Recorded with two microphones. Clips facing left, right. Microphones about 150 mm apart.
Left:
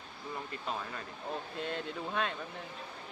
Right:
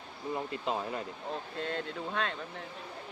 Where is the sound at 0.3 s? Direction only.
20° right (ahead or behind).